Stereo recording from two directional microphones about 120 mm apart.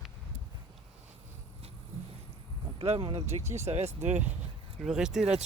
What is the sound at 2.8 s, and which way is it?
Speech, 50° right (ahead or behind).